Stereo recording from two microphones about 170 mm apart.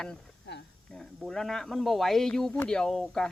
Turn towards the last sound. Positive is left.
turn(degrees=5)  # may be behind; listen again after turning